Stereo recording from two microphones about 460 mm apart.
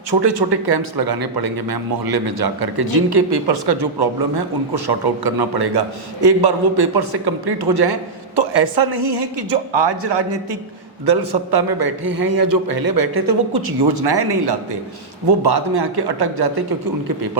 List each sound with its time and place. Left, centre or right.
0.1 s a woman's voice: right
11.5 s a man's voice: right